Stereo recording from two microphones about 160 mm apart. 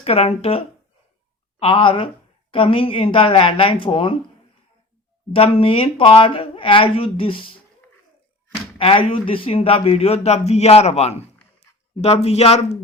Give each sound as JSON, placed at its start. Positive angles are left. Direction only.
{"t": 0.0, "sound": "a man's voice", "side_deg": 40}
{"t": 5.3, "sound": "a man's voice", "side_deg": 35}
{"t": 8.8, "sound": "a man's voice", "side_deg": 35}